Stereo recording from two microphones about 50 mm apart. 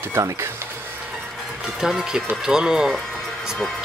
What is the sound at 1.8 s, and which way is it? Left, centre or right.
Speech, centre.